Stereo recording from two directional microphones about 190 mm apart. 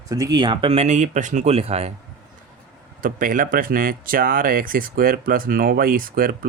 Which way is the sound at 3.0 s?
45° right (ahead or behind).